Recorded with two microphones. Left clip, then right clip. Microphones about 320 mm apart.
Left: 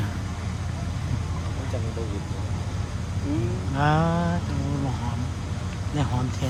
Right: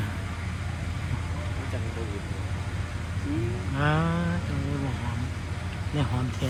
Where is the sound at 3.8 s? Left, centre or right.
Centre.